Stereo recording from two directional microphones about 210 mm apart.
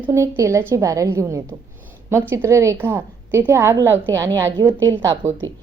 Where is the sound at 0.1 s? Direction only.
15° right (ahead or behind).